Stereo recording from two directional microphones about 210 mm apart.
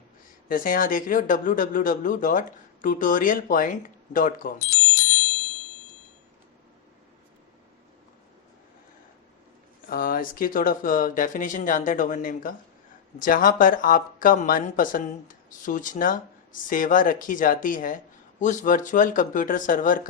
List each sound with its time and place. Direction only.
0.4 s speech: 40° left (ahead or behind)
9.9 s speech: 40° left (ahead or behind)